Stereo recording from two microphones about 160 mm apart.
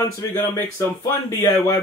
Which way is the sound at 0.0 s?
15° left (ahead or behind).